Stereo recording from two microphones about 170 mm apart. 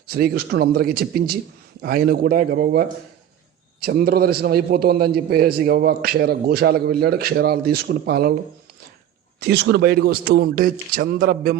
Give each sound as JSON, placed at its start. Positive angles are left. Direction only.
{"t": 0.1, "sound": "a man's voice", "side_deg": -65}
{"t": 9.4, "sound": "a man's voice", "side_deg": -80}